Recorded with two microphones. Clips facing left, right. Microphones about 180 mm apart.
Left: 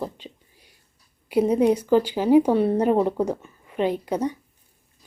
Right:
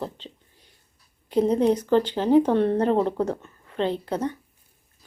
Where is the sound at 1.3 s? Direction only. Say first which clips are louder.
Left 1 dB; 10° left (ahead or behind).